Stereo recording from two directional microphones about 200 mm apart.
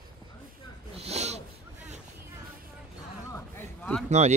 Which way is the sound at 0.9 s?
30° right (ahead or behind).